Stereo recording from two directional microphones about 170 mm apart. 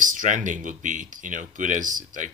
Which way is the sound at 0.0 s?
50° right (ahead or behind).